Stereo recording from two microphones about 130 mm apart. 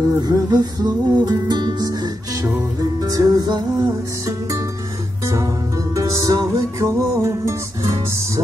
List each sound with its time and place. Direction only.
0.1 s music: 30° right (ahead or behind)
5.9 s music: 25° right (ahead or behind)